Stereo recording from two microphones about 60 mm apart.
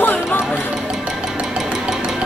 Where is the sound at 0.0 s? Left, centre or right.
Left.